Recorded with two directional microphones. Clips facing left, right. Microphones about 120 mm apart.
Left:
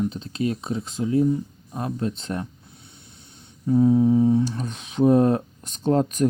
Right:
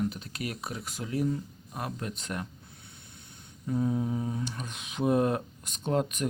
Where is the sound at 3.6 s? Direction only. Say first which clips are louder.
Left 12 dB; 30° left (ahead or behind).